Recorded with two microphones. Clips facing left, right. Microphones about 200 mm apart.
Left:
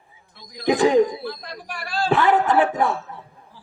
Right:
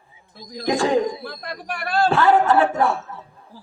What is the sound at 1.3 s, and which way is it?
Speech, 60° right (ahead or behind).